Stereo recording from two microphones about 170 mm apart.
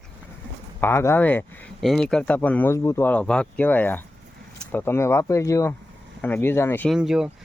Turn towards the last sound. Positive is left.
turn(degrees=-5)  # may be behind; listen again after turning